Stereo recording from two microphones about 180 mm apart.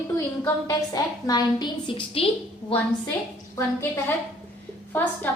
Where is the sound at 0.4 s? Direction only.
20° left (ahead or behind).